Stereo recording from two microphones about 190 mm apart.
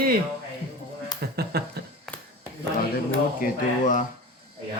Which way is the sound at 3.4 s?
45° left (ahead or behind).